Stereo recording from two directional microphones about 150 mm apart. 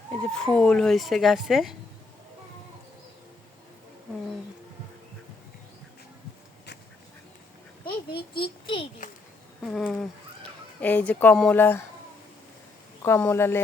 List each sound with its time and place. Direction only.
0.1 s speech: 5° left (ahead or behind)
8.3 s a child's voice: 35° left (ahead or behind)
9.6 s speech: centre (ahead or behind)
13.0 s speech: 15° left (ahead or behind)